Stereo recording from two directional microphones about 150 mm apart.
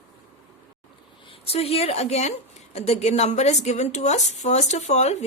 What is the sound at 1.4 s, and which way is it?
A woman's voice, 40° left (ahead or behind).